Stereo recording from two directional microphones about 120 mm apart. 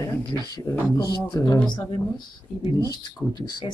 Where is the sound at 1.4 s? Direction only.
30° left (ahead or behind).